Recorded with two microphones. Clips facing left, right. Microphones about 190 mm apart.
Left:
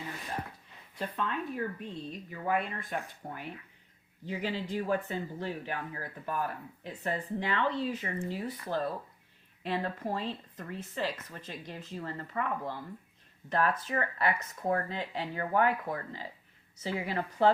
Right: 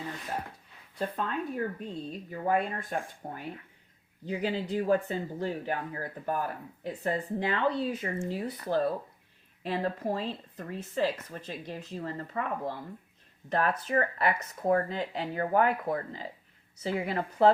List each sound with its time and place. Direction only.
0.9 s speech: 45° right (ahead or behind)